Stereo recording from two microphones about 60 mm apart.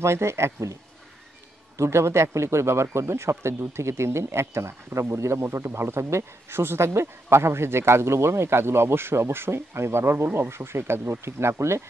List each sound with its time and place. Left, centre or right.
0.0 s speech: right
1.8 s speech: right